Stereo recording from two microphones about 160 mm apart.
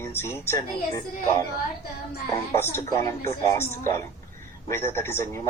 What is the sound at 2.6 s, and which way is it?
A man's voice, 15° left (ahead or behind).